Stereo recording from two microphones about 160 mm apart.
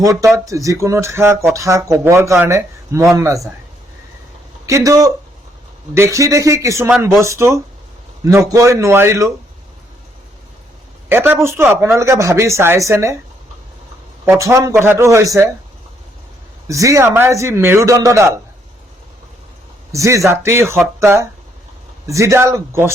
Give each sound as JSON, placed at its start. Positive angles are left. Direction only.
{"t": 0.0, "sound": "speech", "side_deg": -20}
{"t": 4.6, "sound": "speech", "side_deg": -20}
{"t": 11.1, "sound": "speech", "side_deg": -15}
{"t": 14.3, "sound": "speech", "side_deg": -20}
{"t": 16.6, "sound": "speech", "side_deg": -20}
{"t": 19.9, "sound": "speech", "side_deg": -20}